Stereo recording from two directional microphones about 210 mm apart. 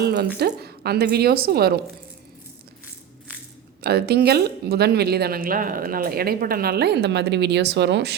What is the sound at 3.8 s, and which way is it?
Speech, 50° right (ahead or behind).